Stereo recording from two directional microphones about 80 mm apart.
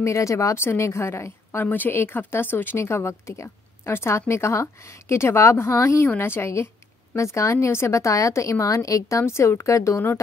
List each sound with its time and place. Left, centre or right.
0.0 s a woman's voice: left
9.2 s a woman's voice: left